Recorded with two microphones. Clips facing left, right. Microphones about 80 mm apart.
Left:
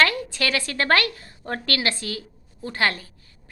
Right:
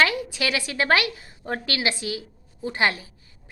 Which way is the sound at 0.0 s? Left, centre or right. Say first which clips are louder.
Left 1 dB; centre.